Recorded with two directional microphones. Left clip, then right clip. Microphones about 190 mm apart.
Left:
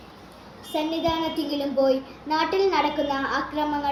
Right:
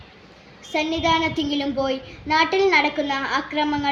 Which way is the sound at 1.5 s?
25° right (ahead or behind).